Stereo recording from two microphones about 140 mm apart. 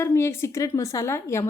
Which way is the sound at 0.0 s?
15° left (ahead or behind).